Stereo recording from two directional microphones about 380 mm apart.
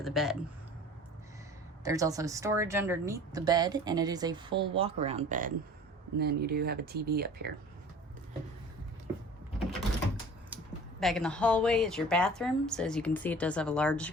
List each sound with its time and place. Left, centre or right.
0.0 s a woman's voice: centre
1.8 s speech: centre; by 7.5 s right
10.5 s computer keyboard: centre
11.0 s a woman's voice: centre